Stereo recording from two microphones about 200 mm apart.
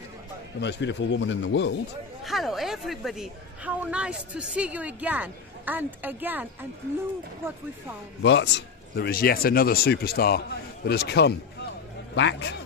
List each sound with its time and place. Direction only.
0.6 s a man's voice: 60° left (ahead or behind)
2.2 s a woman's voice: centre (ahead or behind)
8.2 s a man's voice: 65° left (ahead or behind)